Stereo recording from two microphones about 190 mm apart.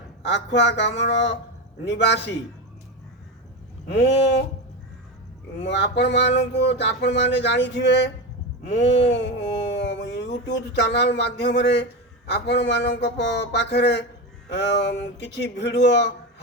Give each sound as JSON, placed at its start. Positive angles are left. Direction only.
{"t": 0.2, "sound": "a man's voice", "side_deg": 65}
{"t": 3.8, "sound": "speech", "side_deg": 70}
{"t": 5.5, "sound": "a man's voice", "side_deg": 65}
{"t": 8.6, "sound": "a sound", "side_deg": 70}
{"t": 10.8, "sound": "a man's voice", "side_deg": 65}